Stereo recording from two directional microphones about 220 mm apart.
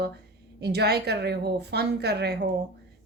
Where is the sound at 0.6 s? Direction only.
50° right (ahead or behind).